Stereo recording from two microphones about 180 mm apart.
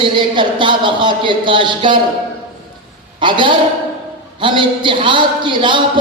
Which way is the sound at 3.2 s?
25° right (ahead or behind).